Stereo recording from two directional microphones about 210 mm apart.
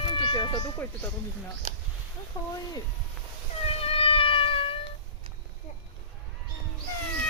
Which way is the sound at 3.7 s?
25° left (ahead or behind).